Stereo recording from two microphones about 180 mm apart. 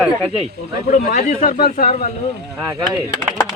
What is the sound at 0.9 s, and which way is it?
Speech, 50° left (ahead or behind).